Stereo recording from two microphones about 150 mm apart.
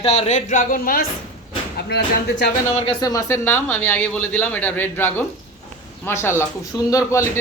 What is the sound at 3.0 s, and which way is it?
Speech, 20° left (ahead or behind).